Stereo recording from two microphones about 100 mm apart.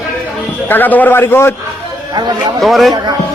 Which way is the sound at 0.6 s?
20° left (ahead or behind).